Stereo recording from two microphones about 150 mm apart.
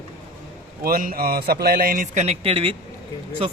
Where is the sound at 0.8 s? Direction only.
75° right (ahead or behind).